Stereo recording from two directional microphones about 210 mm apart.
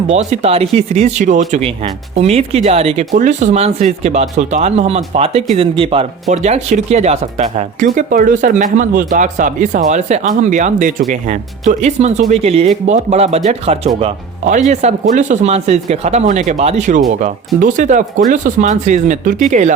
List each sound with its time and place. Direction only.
0.1 s speech: 35° right (ahead or behind)